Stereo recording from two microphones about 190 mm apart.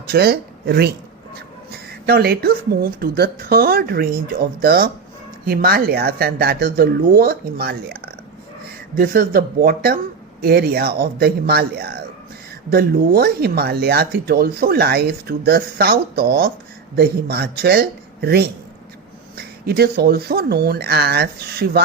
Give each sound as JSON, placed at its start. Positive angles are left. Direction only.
{"t": 0.1, "sound": "speech", "side_deg": -55}
{"t": 1.7, "sound": "a sound", "side_deg": -55}
{"t": 3.0, "sound": "speech", "side_deg": -55}
{"t": 19.6, "sound": "speech", "side_deg": -55}